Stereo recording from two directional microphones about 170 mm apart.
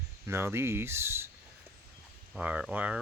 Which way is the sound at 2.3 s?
5° right (ahead or behind).